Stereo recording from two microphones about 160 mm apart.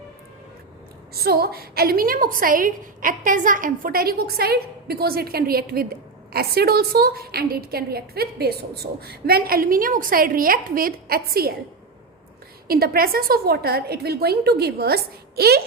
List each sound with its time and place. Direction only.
1.1 s a woman's voice: 75° right (ahead or behind)
12.6 s a woman's voice: 70° right (ahead or behind)